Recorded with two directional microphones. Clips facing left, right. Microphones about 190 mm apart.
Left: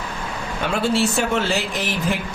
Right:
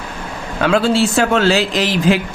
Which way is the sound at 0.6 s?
90° right.